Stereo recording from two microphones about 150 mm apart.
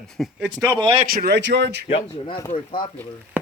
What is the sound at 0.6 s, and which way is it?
Speech, 25° right (ahead or behind).